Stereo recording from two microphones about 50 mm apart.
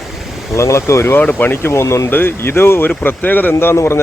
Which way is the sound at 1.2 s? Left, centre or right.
Left.